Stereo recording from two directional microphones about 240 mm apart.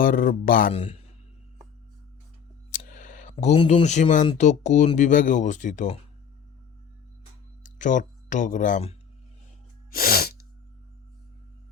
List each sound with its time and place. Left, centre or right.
0.0 s speech: left
2.7 s speech: left
7.6 s speech: left
9.9 s sneeze: left